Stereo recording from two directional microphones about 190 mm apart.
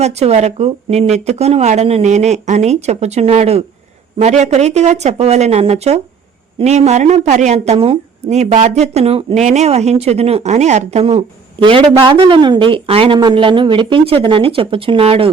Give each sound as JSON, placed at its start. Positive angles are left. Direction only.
{"t": 0.0, "sound": "a woman's voice", "side_deg": -35}